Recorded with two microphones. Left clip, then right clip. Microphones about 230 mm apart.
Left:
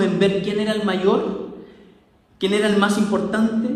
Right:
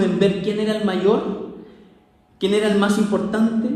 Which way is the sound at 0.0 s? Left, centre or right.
Left.